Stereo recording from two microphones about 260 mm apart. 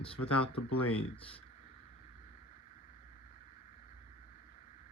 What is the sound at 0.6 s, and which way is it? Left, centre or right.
Speech, left.